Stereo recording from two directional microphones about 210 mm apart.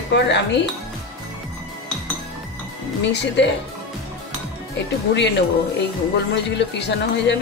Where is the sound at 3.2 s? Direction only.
55° left (ahead or behind).